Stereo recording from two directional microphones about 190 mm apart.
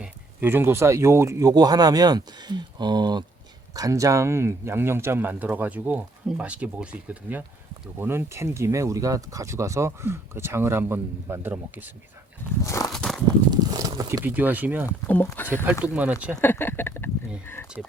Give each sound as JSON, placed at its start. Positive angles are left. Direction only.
{"t": 0.0, "sound": "speech", "side_deg": -10}
{"t": 12.6, "sound": "walk", "side_deg": 15}
{"t": 12.9, "sound": "walk", "side_deg": 0}
{"t": 13.5, "sound": "speech", "side_deg": -20}
{"t": 15.0, "sound": "speech", "side_deg": 10}
{"t": 15.4, "sound": "speech", "side_deg": -10}
{"t": 16.4, "sound": "speech", "side_deg": 10}